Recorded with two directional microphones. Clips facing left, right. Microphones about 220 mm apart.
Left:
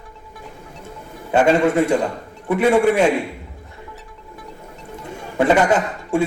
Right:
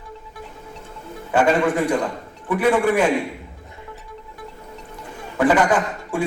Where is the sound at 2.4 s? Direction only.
25° left (ahead or behind).